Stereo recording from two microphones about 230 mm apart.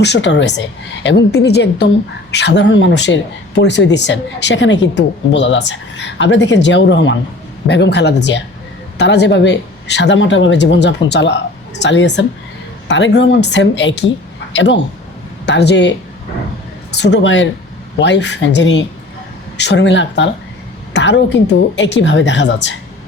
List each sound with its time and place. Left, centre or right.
0.0 s a man's voice: left